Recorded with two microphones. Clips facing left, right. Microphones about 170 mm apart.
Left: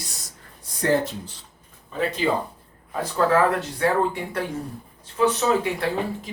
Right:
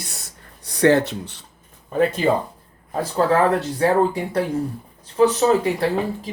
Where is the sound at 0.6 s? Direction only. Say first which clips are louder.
Right 6 dB; 75° right (ahead or behind).